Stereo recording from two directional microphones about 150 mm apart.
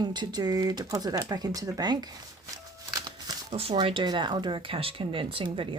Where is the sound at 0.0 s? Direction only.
30° right (ahead or behind).